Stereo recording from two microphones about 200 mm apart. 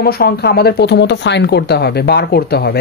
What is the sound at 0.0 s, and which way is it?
Speech, 50° left (ahead or behind).